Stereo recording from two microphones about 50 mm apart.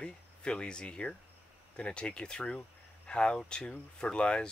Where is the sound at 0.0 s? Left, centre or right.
Centre.